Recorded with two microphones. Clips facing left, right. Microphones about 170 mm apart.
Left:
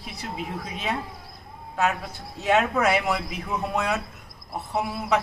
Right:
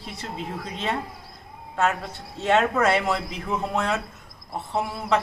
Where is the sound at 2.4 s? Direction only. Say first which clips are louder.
Right 1 dB; 5° left (ahead or behind).